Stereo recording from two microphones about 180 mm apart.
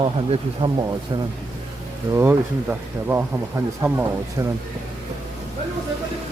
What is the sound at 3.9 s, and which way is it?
Speech, 15° right (ahead or behind).